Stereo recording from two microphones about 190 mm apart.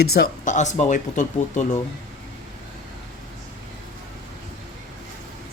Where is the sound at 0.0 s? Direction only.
55° left (ahead or behind).